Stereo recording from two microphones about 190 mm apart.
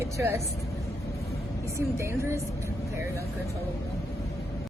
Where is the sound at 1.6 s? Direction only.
15° right (ahead or behind).